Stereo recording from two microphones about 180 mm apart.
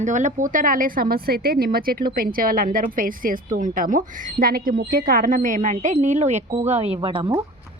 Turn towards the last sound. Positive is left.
turn(degrees=-25)  # may be behind; listen again after turning